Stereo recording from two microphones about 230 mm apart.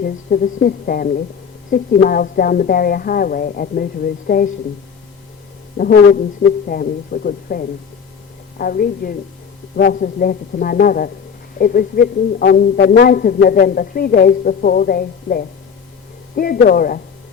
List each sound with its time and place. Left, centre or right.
0.0 s a man's voice: left
5.8 s a man's voice: left